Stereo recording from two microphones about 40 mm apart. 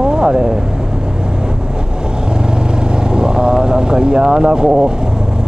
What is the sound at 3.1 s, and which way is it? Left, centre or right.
Speech, right.